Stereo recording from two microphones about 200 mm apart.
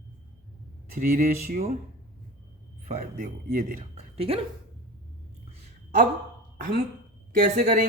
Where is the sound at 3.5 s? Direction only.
45° right (ahead or behind).